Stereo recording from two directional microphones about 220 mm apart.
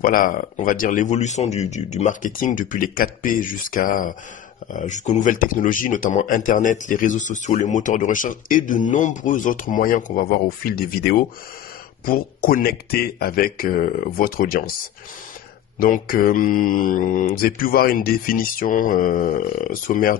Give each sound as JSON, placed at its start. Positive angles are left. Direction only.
{"t": 0.0, "sound": "speech", "side_deg": 40}
{"t": 15.8, "sound": "speech", "side_deg": 40}